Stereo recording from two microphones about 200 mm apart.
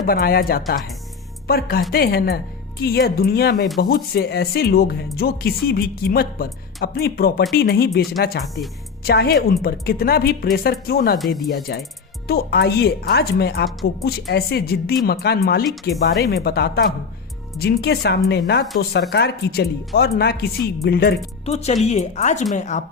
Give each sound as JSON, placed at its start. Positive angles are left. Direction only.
{"t": 0.0, "sound": "a woman's voice", "side_deg": 50}
{"t": 21.4, "sound": "speech", "side_deg": 35}